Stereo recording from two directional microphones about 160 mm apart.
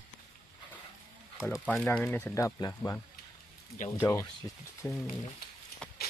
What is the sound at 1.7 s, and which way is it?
Speech, 5° left (ahead or behind).